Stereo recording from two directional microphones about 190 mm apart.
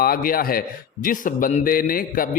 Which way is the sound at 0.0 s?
50° left (ahead or behind).